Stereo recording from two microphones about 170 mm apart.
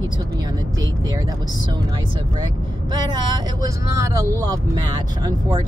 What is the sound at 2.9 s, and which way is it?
Speech, 25° right (ahead or behind).